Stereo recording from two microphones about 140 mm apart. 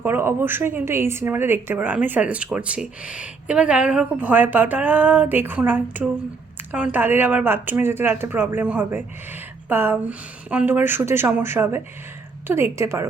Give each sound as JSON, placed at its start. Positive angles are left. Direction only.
{"t": 0.0, "sound": "a woman's voice", "side_deg": -15}